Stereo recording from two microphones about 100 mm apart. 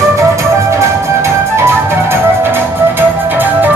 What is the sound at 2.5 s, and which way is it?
Music, 20° right (ahead or behind).